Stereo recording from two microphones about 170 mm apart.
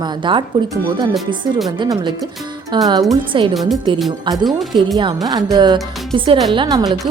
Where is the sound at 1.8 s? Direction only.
25° right (ahead or behind).